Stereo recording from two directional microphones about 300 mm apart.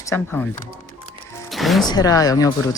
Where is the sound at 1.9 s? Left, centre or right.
Centre.